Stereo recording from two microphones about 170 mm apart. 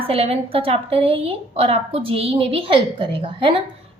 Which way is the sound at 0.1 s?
35° right (ahead or behind).